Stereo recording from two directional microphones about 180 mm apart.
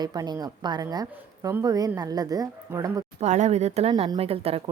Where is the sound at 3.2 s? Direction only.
40° right (ahead or behind).